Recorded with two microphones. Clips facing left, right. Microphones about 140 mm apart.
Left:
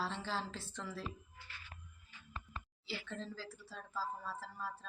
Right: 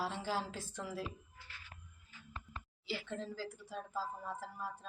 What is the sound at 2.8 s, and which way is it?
Speech, 15° right (ahead or behind).